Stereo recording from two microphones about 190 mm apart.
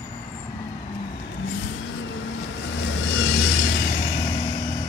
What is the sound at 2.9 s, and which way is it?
Vehicle, 70° left (ahead or behind).